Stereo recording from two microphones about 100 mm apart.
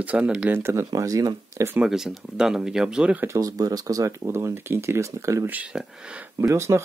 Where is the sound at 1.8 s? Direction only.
5° right (ahead or behind).